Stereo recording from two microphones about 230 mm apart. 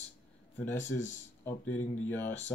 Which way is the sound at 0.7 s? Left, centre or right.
Left.